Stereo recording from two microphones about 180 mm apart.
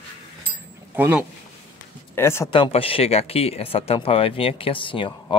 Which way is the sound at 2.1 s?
15° left (ahead or behind).